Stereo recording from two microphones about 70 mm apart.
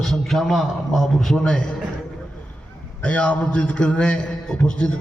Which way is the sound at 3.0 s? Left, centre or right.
Centre.